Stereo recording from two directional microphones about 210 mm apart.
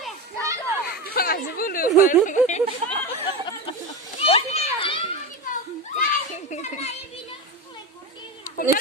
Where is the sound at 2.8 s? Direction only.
30° right (ahead or behind).